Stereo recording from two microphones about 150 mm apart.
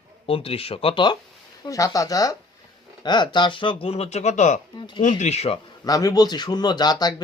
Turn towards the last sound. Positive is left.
turn(degrees=25)  # may be behind; listen again after turning